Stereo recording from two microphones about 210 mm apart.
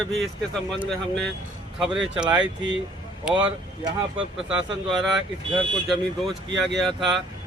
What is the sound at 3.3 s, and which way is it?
Speech, 5° right (ahead or behind).